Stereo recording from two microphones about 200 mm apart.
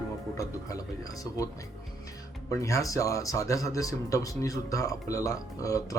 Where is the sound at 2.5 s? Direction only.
15° left (ahead or behind).